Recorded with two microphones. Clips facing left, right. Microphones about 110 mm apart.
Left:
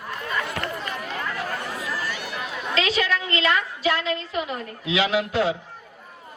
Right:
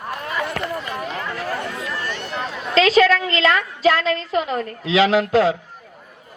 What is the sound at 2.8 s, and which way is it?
A woman's voice, 90° right.